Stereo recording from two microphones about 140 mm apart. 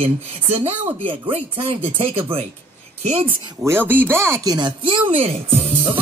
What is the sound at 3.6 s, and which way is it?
Speech, 15° right (ahead or behind).